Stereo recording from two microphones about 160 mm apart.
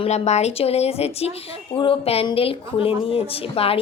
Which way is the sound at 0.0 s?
45° left (ahead or behind).